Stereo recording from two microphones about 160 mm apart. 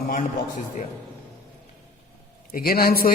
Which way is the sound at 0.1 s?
55° left (ahead or behind).